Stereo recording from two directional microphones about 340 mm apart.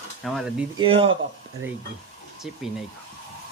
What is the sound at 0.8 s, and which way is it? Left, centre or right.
Speech, centre.